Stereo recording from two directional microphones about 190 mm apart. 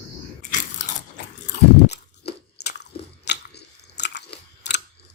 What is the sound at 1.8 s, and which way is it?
Crunch, 60° left (ahead or behind).